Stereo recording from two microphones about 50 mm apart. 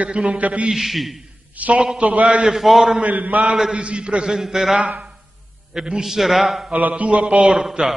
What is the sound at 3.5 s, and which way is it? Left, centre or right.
A man's voice, centre.